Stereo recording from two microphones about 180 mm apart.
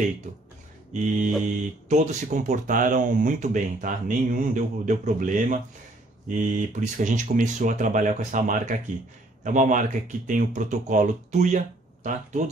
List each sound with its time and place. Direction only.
0.9 s speech: 45° right (ahead or behind)